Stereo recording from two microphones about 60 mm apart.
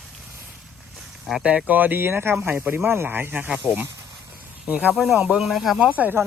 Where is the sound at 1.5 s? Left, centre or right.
Right.